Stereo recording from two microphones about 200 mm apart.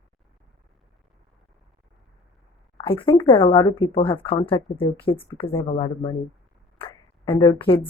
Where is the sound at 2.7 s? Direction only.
25° left (ahead or behind).